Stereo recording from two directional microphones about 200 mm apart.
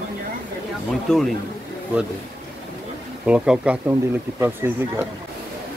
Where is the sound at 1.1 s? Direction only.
5° left (ahead or behind).